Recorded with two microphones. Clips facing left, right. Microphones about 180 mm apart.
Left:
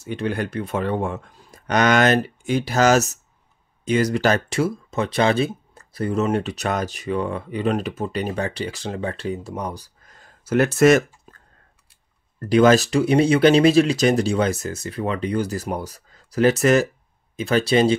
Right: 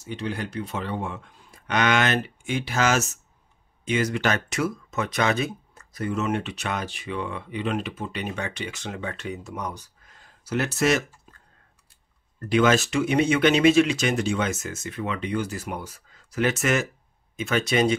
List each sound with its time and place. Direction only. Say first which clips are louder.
0.0 s speech: left 6 dB; 55° left (ahead or behind)
12.4 s speech: left 5 dB; 35° left (ahead or behind)